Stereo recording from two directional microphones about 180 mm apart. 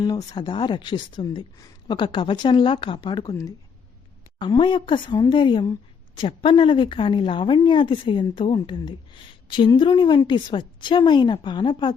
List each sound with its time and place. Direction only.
0.0 s speech: 20° left (ahead or behind)